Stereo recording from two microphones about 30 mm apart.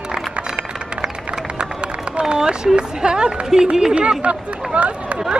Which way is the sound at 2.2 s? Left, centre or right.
Right.